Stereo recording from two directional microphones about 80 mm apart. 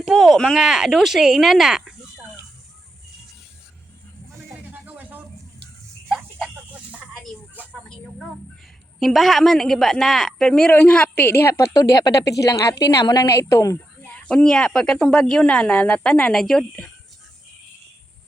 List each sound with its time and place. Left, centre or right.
0.0 s a sound: centre
0.3 s a woman's voice: centre
4.7 s a sound: centre
7.6 s a sound: right
9.0 s a woman's voice: centre
11.1 s a woman's voice: left
11.7 s speech: left
13.3 s speech: left
14.1 s a woman's voice: centre